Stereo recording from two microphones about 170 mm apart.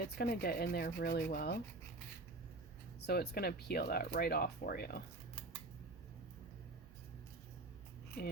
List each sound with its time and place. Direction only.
0.0 s speech: 65° left (ahead or behind)
3.1 s speech: 65° left (ahead or behind)
8.2 s speech: 70° left (ahead or behind)